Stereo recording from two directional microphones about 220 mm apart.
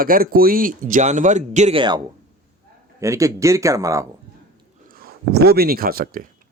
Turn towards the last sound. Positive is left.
turn(degrees=-40)  # may be behind; listen again after turning